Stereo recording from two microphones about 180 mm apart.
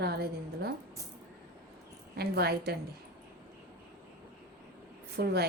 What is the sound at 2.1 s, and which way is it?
Speech, 60° right (ahead or behind).